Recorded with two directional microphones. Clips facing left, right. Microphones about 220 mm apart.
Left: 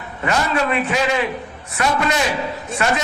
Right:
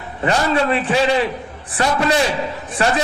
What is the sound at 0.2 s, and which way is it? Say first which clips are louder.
A man's voice: right 3 dB; 30° right (ahead or behind).